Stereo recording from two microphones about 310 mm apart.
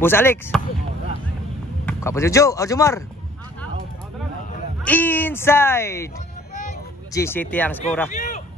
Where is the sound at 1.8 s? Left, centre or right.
Centre.